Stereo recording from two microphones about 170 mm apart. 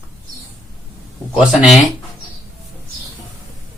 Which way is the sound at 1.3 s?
Centre (ahead or behind).